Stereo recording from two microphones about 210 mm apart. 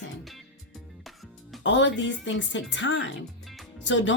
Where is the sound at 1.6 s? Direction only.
60° left (ahead or behind).